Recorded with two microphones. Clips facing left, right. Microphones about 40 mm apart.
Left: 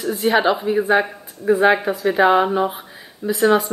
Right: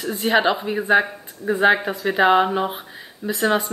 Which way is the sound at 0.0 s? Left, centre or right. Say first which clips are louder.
Left 2 dB; centre.